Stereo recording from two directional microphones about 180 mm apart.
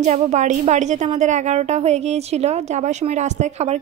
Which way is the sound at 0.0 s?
40° right (ahead or behind).